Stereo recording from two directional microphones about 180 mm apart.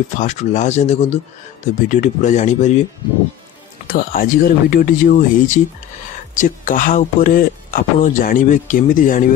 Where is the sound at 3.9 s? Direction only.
50° left (ahead or behind).